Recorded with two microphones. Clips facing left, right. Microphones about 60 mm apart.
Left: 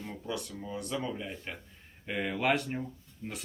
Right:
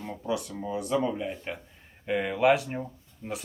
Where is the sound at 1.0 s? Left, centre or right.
Centre.